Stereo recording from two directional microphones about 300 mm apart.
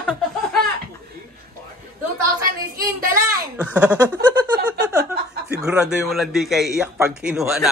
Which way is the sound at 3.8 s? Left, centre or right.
Centre.